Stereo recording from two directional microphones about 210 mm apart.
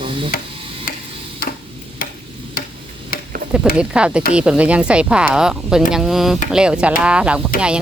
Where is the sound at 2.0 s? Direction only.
40° left (ahead or behind).